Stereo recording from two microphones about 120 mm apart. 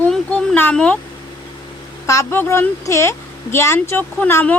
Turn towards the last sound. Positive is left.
turn(degrees=15)  # may be behind; listen again after turning